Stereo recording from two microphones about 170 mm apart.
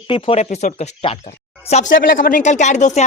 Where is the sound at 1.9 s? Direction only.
60° left (ahead or behind).